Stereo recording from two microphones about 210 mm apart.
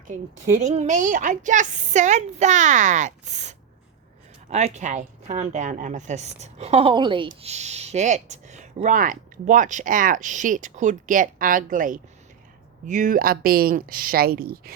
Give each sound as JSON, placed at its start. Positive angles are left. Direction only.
{"t": 0.1, "sound": "a woman's voice", "side_deg": -35}